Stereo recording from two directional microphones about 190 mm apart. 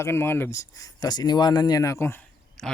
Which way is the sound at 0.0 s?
10° left (ahead or behind).